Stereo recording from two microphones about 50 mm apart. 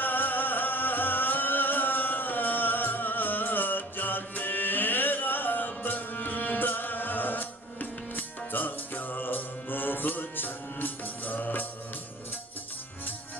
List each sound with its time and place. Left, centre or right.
0.0 s music: left